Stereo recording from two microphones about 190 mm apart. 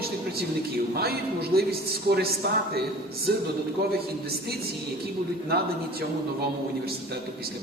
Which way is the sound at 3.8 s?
55° right (ahead or behind).